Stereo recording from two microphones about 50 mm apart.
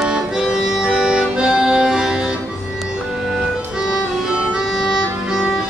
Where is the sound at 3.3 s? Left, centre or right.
Centre.